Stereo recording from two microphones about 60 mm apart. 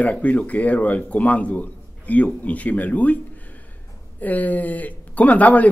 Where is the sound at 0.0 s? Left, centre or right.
Left.